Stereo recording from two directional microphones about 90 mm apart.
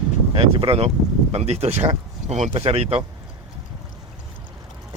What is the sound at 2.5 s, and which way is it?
Speech, 90° right.